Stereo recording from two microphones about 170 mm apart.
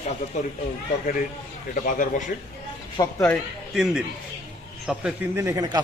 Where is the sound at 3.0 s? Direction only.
20° left (ahead or behind).